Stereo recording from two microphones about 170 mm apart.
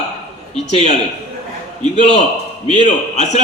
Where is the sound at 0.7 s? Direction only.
40° left (ahead or behind).